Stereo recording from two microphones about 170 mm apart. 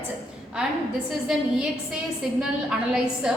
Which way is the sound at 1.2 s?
5° right (ahead or behind).